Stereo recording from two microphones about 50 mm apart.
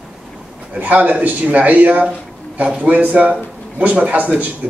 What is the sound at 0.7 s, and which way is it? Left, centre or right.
A man's voice, right.